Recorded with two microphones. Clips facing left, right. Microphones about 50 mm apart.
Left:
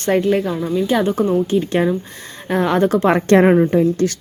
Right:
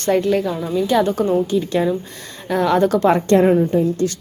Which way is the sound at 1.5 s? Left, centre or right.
Left.